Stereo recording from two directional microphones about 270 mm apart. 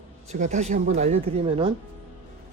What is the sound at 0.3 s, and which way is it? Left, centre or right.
Speech, right.